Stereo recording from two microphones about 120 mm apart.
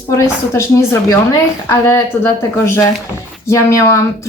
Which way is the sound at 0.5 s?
25° left (ahead or behind).